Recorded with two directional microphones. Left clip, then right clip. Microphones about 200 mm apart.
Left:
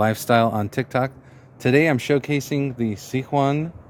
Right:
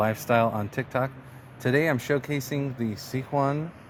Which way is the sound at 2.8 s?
85° left.